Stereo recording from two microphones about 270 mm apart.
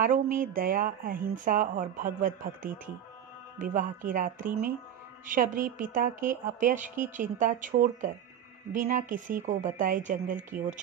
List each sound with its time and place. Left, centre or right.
0.0 s a woman's voice: right